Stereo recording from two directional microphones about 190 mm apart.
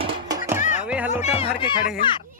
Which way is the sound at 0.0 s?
25° right (ahead or behind).